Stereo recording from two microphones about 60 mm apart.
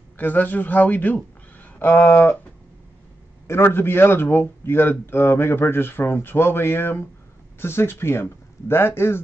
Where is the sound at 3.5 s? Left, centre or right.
Left.